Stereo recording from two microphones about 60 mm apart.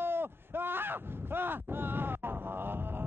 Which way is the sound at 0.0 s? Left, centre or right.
Right.